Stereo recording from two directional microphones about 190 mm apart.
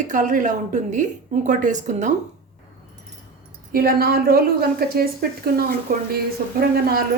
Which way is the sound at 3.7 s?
50° right (ahead or behind).